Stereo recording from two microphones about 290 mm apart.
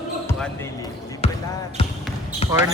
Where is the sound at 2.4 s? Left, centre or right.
Centre.